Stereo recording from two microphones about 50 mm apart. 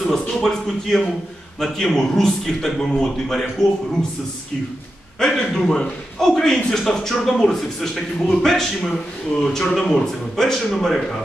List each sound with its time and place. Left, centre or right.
0.0 s a man's voice: centre
5.2 s a man's voice: centre